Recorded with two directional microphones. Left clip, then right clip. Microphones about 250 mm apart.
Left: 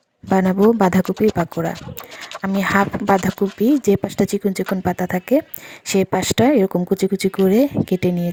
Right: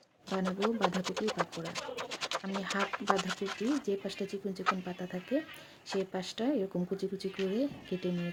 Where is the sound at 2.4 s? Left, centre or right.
Left.